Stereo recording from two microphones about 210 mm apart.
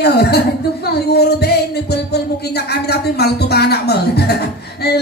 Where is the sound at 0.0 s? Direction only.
50° left (ahead or behind).